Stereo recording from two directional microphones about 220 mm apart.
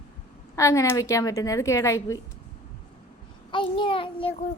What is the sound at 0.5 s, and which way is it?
A woman's voice, 15° left (ahead or behind).